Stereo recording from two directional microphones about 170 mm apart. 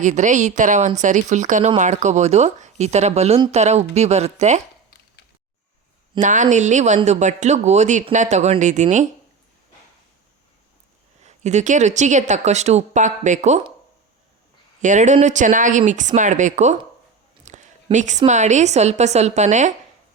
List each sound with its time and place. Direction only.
0.0 s speech: 45° right (ahead or behind)
6.1 s speech: 45° right (ahead or behind)
11.2 s speech: 40° right (ahead or behind)
14.8 s speech: 45° right (ahead or behind)
17.4 s a sound: 45° right (ahead or behind)
17.9 s speech: 45° right (ahead or behind)